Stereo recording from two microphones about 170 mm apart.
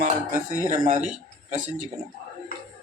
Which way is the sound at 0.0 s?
50° right (ahead or behind).